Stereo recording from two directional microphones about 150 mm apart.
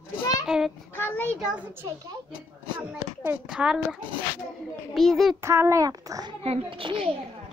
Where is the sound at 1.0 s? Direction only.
15° left (ahead or behind).